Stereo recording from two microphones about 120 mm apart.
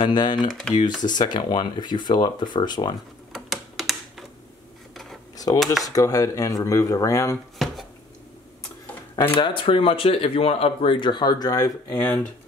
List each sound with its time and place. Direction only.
0.0 s speech: 40° left (ahead or behind)
0.5 s speech: 5° left (ahead or behind)
0.7 s speech: 35° left (ahead or behind)
3.3 s typing: centre (ahead or behind)
5.9 s speech: 30° left (ahead or behind)
7.5 s chopping: centre (ahead or behind)
9.1 s speech: 45° left (ahead or behind); by 12.0 s 30° left (ahead or behind)